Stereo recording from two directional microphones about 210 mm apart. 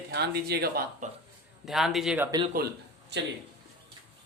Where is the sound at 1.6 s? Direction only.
Centre (ahead or behind).